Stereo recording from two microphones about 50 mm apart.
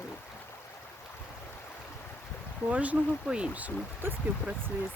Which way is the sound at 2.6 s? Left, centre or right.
Right.